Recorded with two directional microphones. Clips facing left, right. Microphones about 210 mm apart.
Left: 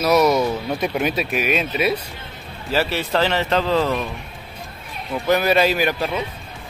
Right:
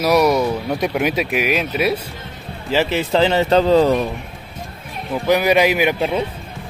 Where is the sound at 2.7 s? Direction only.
20° right (ahead or behind).